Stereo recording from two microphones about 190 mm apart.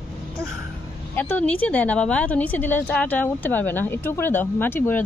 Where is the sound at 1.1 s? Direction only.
10° left (ahead or behind).